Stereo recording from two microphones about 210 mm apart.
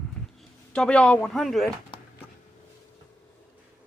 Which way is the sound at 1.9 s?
20° left (ahead or behind).